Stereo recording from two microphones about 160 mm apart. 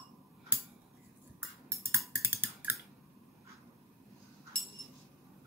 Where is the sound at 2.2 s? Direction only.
15° right (ahead or behind).